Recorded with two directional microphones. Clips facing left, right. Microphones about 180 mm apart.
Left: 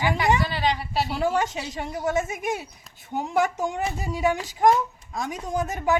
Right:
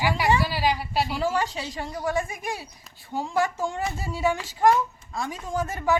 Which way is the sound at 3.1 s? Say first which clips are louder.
Left 2 dB; 20° left (ahead or behind).